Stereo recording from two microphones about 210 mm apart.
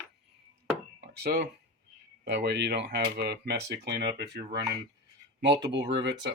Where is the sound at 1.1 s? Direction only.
50° right (ahead or behind).